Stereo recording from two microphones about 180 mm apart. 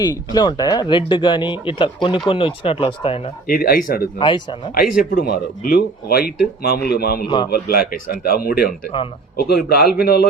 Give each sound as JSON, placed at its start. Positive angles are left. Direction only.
{"t": 0.0, "sound": "speech", "side_deg": 25}
{"t": 3.4, "sound": "speech", "side_deg": 55}